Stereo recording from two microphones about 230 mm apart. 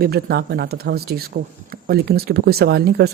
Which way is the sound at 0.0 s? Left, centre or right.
Right.